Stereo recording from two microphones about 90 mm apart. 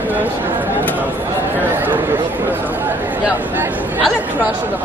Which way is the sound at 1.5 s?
20° right (ahead or behind).